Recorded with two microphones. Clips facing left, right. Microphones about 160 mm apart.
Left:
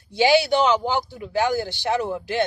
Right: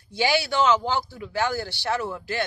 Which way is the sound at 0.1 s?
20° left (ahead or behind).